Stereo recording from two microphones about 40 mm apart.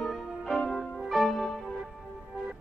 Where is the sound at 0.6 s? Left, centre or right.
Centre.